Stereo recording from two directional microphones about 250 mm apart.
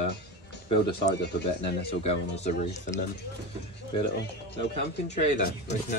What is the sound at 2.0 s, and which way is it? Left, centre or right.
Speech, left.